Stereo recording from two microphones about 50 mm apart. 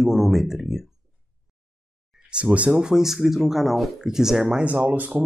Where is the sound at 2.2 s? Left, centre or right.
Right.